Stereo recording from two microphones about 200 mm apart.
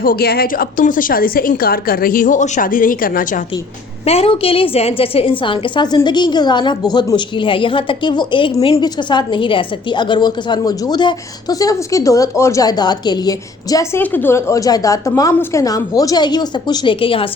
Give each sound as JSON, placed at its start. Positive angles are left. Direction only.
{"t": 0.0, "sound": "a woman's voice", "side_deg": 50}
{"t": 4.0, "sound": "a woman's voice", "side_deg": 30}